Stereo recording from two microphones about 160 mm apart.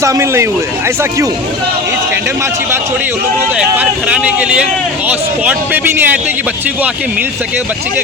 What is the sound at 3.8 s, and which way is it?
A man's voice, 10° right (ahead or behind).